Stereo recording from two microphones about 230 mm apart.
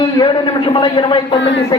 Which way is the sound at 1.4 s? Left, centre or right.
Left.